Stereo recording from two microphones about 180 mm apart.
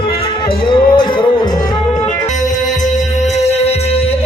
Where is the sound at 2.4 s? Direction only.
45° left (ahead or behind).